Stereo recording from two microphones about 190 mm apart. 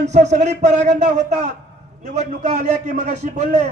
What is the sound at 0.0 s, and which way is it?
A man's voice, 35° right (ahead or behind).